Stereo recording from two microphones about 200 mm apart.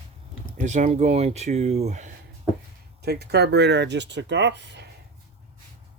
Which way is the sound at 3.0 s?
55° right (ahead or behind).